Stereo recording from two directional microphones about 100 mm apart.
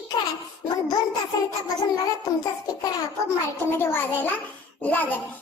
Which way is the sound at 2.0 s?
40° left (ahead or behind).